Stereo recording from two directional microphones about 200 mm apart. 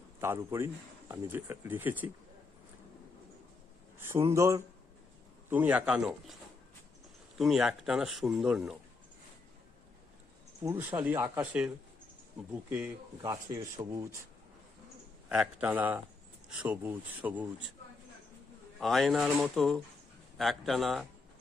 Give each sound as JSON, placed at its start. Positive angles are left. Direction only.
{"t": 0.2, "sound": "speech", "side_deg": -10}
{"t": 3.9, "sound": "speech", "side_deg": -15}
{"t": 7.3, "sound": "speech", "side_deg": 0}
{"t": 10.6, "sound": "speech", "side_deg": -10}
{"t": 13.2, "sound": "speech", "side_deg": -15}
{"t": 15.3, "sound": "speech", "side_deg": -5}
{"t": 18.8, "sound": "speech", "side_deg": 0}